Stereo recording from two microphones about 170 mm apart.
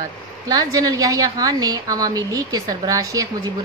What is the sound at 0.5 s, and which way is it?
A woman's voice, 20° right (ahead or behind).